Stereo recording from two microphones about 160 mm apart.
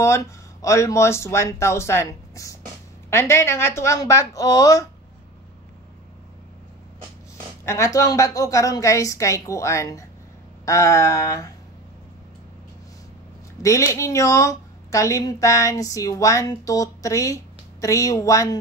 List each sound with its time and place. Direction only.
0.0 s a woman's voice: 15° left (ahead or behind)
7.6 s a woman's voice: 20° left (ahead or behind)
13.6 s a woman's voice: 20° left (ahead or behind)